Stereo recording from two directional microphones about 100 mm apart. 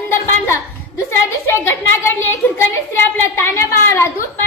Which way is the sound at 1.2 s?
25° left (ahead or behind).